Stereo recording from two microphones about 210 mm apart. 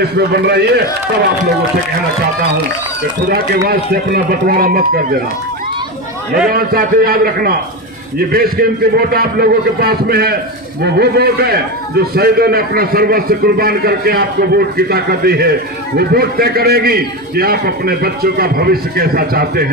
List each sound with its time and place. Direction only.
0.3 s a man's voice: 50° right (ahead or behind)
3.3 s a man's voice: 45° right (ahead or behind)
6.5 s a man's voice: 45° right (ahead or behind)